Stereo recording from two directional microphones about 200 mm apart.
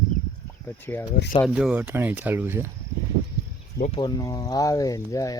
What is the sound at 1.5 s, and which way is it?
Speech, 5° right (ahead or behind).